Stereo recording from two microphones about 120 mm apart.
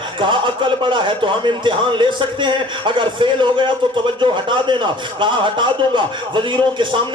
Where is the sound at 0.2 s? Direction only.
40° right (ahead or behind).